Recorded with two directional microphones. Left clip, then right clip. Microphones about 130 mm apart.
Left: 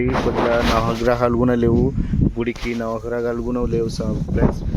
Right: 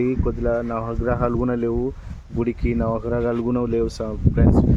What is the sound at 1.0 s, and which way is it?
Speech, 55° left (ahead or behind).